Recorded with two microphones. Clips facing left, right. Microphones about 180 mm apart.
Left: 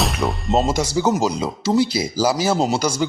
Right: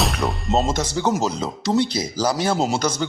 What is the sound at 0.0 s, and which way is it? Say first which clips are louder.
Speech: left 1 dB; centre (ahead or behind).